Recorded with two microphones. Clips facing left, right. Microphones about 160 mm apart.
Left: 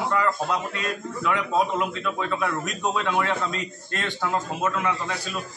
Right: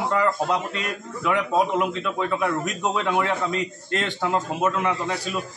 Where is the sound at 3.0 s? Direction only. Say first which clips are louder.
Right 2 dB; 15° right (ahead or behind).